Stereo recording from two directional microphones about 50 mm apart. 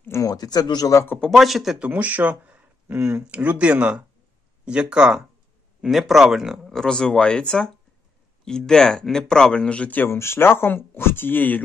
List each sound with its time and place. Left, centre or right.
0.1 s a sound: left
1.3 s a man's voice: centre
1.9 s speech: right
3.0 s speech: right
3.3 s speech: right
5.8 s a man's voice: centre
6.7 s speech: centre; by 10.0 s left
10.0 s speech: left